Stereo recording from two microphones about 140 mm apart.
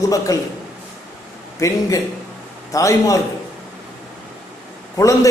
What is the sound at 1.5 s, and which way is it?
A man's voice, 25° left (ahead or behind).